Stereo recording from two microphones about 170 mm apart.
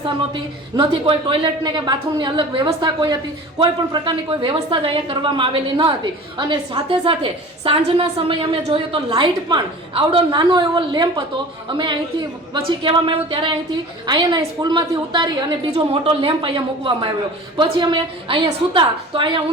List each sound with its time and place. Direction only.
0.8 s a woman's voice: 30° right (ahead or behind)
12.5 s a woman's voice: 30° right (ahead or behind)